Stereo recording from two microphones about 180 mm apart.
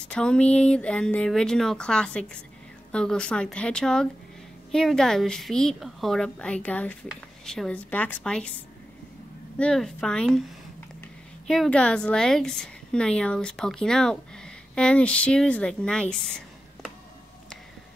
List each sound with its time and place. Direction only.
0.1 s a woman's voice: 5° left (ahead or behind)
9.6 s a woman's voice: 5° left (ahead or behind)
11.4 s a woman's voice: centre (ahead or behind)